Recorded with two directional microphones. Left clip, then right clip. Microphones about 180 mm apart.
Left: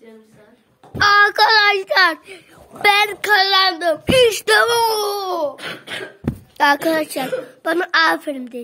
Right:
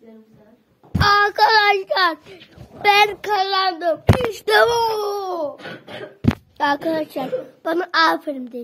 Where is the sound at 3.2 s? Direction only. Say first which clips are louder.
Left 5 dB; 25° left (ahead or behind).